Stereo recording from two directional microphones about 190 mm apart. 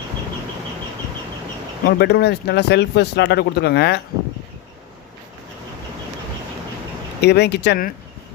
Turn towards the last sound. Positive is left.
turn(degrees=55)  # may be behind; listen again after turning